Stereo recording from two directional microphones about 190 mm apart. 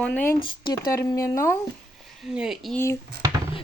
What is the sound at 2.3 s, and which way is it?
Speech, 5° right (ahead or behind).